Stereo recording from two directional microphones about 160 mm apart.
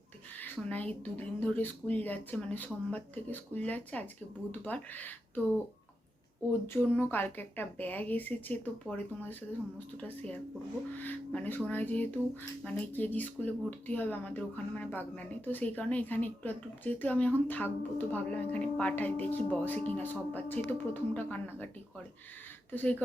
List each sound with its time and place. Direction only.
0.3 s speech: 10° left (ahead or behind)
6.9 s speech: 10° left (ahead or behind)